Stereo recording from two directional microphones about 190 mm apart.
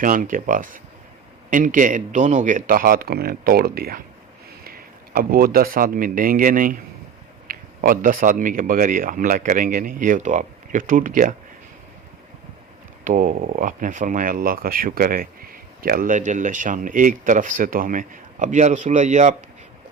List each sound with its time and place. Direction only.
0.0 s speech: 45° right (ahead or behind)
13.1 s speech: 45° right (ahead or behind)